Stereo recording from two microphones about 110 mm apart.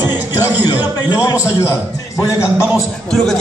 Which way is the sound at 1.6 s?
25° left (ahead or behind).